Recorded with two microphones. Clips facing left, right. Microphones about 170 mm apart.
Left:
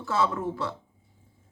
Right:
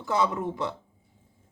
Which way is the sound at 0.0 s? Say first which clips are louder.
Right 1 dB; 15° right (ahead or behind).